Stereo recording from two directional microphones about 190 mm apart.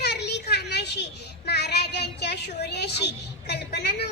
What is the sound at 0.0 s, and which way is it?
Children playing, 60° left (ahead or behind).